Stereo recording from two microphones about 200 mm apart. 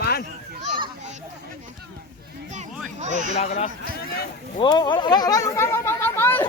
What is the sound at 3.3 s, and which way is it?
Speech, 35° left (ahead or behind).